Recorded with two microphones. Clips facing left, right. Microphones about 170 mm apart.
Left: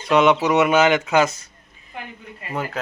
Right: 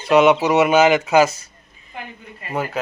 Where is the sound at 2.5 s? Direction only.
5° right (ahead or behind).